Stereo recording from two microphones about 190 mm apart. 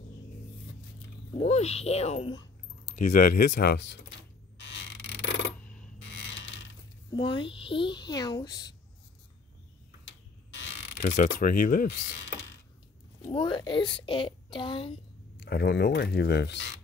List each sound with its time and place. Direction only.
1.4 s speech: 35° left (ahead or behind)
3.0 s speech: 45° left (ahead or behind); by 4.0 s 65° left (ahead or behind)
4.6 s a sound: 70° left (ahead or behind)
7.1 s a child's voice: 25° left (ahead or behind)
11.0 s speech: 40° left (ahead or behind)
13.3 s a child's voice: 25° left (ahead or behind)
15.3 s speech: 60° left (ahead or behind)